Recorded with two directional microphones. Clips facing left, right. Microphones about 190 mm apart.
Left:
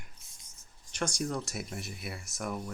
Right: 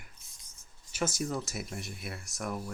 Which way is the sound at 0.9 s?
5° right (ahead or behind).